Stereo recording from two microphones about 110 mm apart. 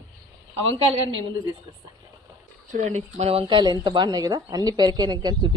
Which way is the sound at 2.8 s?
80° right.